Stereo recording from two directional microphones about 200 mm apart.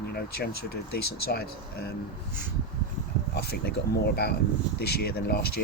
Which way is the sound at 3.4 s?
50° left (ahead or behind).